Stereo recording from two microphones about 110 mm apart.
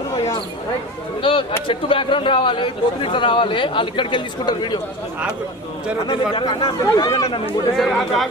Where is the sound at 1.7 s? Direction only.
50° left (ahead or behind).